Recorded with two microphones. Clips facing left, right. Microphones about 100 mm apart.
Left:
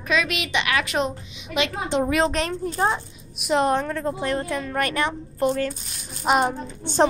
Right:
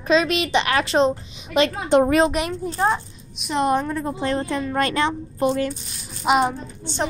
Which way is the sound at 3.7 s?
15° right (ahead or behind).